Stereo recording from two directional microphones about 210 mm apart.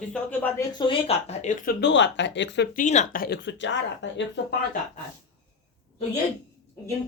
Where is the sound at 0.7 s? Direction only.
20° left (ahead or behind); by 2.6 s 60° left (ahead or behind).